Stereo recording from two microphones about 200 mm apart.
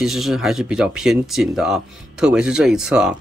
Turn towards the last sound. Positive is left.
turn(degrees=-5)  # may be behind; listen again after turning